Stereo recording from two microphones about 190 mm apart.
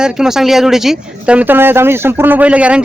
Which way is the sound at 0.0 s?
5° right (ahead or behind).